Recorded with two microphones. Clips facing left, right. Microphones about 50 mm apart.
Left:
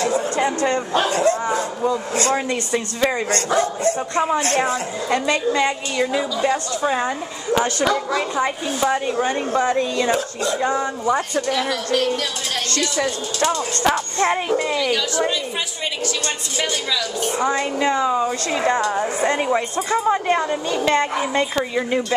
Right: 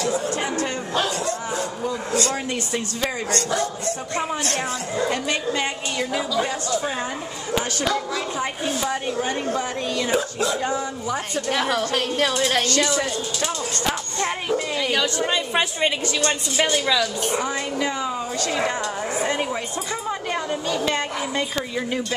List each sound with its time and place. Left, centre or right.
0.5 s speech: left
6.8 s speech: left
7.8 s a woman's voice: centre
9.1 s speech: left
10.1 s speech: centre
10.6 s speech: left
11.4 s a woman's voice: centre
13.4 s speech: left
14.8 s a woman's voice: centre
16.5 s a woman's voice: centre
17.4 s speech: left
21.5 s speech: left